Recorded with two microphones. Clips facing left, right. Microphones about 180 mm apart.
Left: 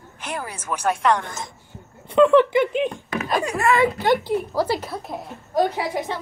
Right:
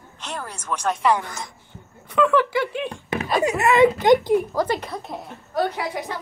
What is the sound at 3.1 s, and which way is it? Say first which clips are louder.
Speech: right 6 dB; 25° right (ahead or behind).